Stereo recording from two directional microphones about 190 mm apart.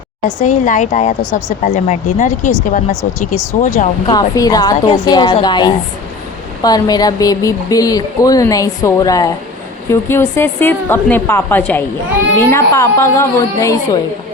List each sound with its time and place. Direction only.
0.3 s speech: 40° left (ahead or behind)
4.0 s a woman's voice: 20° left (ahead or behind)